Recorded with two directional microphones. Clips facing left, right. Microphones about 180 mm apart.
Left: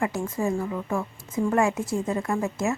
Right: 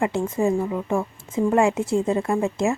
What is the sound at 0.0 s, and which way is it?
A woman's voice, 25° right (ahead or behind).